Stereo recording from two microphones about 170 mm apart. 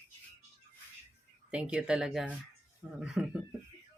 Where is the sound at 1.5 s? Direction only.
5° right (ahead or behind).